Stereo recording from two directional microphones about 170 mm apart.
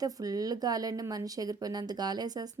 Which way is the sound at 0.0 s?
20° right (ahead or behind).